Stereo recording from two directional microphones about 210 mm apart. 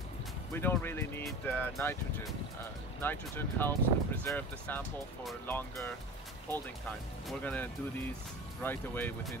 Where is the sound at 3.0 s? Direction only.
10° left (ahead or behind).